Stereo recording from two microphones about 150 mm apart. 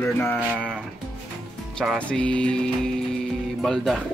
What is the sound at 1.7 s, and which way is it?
Speech, centre (ahead or behind).